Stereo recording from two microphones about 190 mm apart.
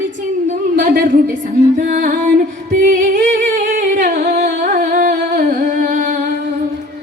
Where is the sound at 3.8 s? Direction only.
40° right (ahead or behind).